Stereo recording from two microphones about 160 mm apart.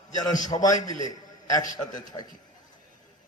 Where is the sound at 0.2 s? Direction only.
25° left (ahead or behind).